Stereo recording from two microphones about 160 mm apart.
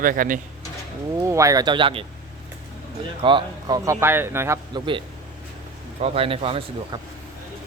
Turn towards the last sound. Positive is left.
turn(degrees=-35)  # may be behind; listen again after turning